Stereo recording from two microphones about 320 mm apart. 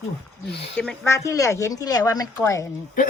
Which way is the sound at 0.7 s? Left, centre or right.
Centre.